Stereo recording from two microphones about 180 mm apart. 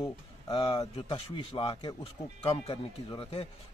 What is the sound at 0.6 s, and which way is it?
A man's voice, 30° left (ahead or behind).